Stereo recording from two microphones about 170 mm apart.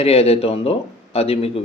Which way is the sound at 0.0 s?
35° left (ahead or behind).